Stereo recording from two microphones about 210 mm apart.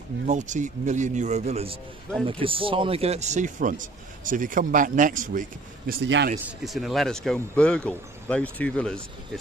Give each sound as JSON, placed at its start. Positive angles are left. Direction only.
{"t": 0.3, "sound": "speech", "side_deg": -35}
{"t": 5.9, "sound": "speech", "side_deg": -55}
{"t": 6.6, "sound": "speech", "side_deg": 0}